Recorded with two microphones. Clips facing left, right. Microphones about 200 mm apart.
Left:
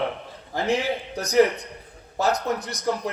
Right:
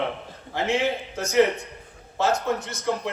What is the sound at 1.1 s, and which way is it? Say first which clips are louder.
A man's voice: left 2 dB; 35° left (ahead or behind).